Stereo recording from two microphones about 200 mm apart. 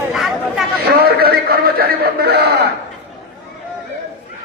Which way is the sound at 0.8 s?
50° right (ahead or behind).